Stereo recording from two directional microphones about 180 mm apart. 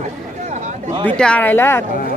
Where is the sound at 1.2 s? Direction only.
5° left (ahead or behind).